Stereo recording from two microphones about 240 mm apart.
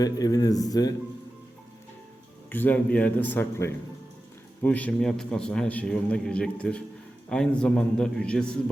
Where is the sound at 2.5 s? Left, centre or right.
Centre.